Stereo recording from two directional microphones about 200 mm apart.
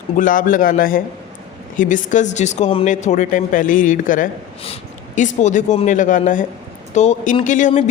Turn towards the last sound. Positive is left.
turn(degrees=35)  # may be behind; listen again after turning